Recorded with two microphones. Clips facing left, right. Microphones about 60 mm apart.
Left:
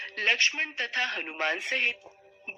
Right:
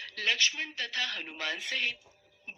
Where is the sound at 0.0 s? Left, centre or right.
Left.